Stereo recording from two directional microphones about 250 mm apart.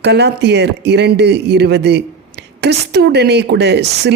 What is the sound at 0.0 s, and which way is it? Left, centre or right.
A woman's voice, right.